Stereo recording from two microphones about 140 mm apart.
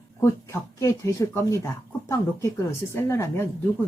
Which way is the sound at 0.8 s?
20° left (ahead or behind).